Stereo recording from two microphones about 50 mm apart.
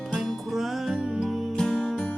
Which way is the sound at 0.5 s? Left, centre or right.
Centre.